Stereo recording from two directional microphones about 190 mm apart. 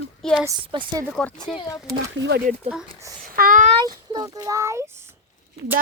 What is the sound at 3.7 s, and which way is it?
A child's voice, 20° right (ahead or behind).